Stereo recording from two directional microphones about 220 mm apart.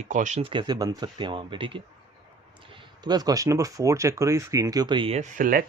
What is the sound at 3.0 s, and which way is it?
Speech, 15° right (ahead or behind).